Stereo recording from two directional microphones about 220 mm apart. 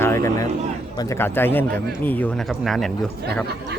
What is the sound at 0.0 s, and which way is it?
A man's voice, 10° left (ahead or behind).